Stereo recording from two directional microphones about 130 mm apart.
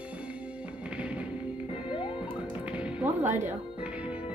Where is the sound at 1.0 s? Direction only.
10° right (ahead or behind).